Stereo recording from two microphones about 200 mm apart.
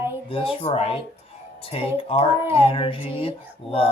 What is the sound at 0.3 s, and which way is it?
Speech, 30° left (ahead or behind).